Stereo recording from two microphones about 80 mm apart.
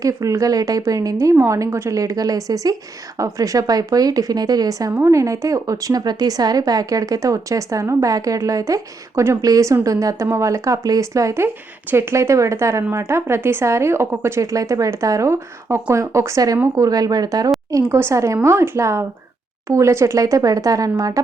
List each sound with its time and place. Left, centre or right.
0.0 s speech: right
4.9 s a woman's voice: right
5.2 s speech: right
11.4 s speech: right